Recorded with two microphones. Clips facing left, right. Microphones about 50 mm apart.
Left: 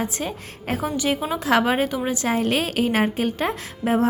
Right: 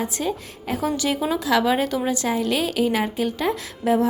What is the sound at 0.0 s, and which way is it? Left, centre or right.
Speech, left.